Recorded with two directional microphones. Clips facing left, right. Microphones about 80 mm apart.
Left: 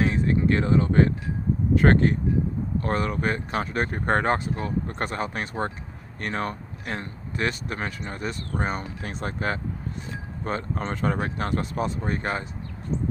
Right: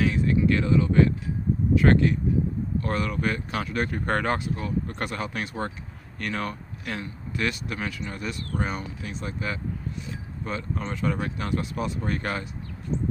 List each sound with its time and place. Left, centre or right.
0.0 s speech: left